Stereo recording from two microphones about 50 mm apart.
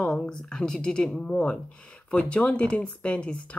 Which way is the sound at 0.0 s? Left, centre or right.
Centre.